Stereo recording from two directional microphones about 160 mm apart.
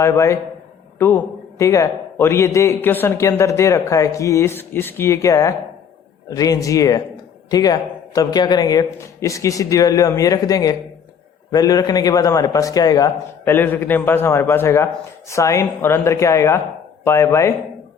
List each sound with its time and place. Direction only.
0.0 s a man's voice: 20° left (ahead or behind)